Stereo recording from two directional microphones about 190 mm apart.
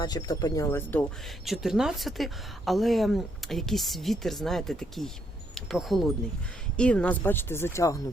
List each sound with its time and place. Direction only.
0.0 s speech: 20° left (ahead or behind)
1.5 s a woman's voice: centre (ahead or behind); by 8.0 s 15° left (ahead or behind)